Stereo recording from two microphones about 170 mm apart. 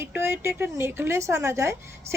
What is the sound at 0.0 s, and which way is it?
Speech, 15° right (ahead or behind).